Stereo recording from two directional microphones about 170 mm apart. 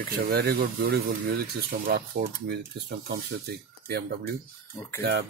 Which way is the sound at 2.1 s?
80° right.